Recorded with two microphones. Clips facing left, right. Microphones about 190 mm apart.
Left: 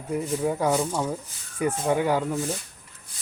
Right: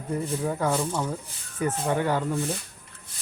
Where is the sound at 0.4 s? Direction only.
10° left (ahead or behind).